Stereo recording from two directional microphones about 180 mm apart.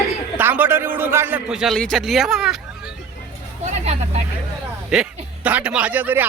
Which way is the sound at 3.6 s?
35° right (ahead or behind).